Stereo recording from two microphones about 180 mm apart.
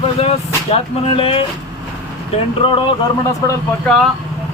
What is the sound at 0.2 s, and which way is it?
Speech, 35° left (ahead or behind).